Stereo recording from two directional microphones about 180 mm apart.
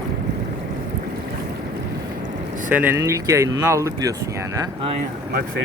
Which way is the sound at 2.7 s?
10° right (ahead or behind).